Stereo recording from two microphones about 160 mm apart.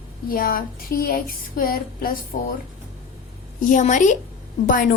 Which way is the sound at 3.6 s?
50° left (ahead or behind).